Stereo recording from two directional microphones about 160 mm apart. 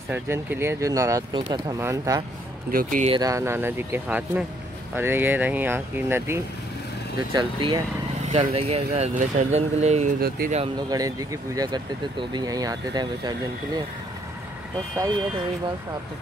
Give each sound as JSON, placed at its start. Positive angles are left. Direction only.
{"t": 0.1, "sound": "speech", "side_deg": -15}
{"t": 2.7, "sound": "speech", "side_deg": -60}
{"t": 3.2, "sound": "speech", "side_deg": -20}
{"t": 7.3, "sound": "speech", "side_deg": -25}
{"t": 8.3, "sound": "speech", "side_deg": -40}
{"t": 10.9, "sound": "speech", "side_deg": -20}
{"t": 15.0, "sound": "speech", "side_deg": -25}